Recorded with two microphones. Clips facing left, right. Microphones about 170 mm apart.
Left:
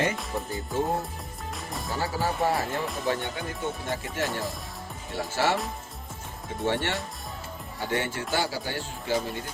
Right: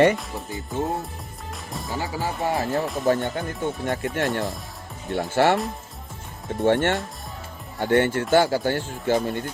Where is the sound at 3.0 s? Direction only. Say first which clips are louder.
Right 9 dB; 45° right (ahead or behind).